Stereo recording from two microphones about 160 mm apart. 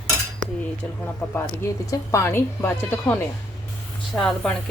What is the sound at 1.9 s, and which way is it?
Speech, 15° left (ahead or behind).